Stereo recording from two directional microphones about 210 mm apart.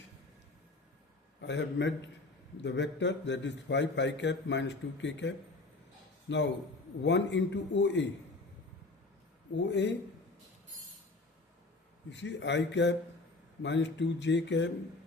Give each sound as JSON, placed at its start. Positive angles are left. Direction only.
{"t": 1.4, "sound": "a man's voice", "side_deg": 55}
{"t": 9.6, "sound": "a man's voice", "side_deg": 55}
{"t": 12.1, "sound": "a man's voice", "side_deg": 60}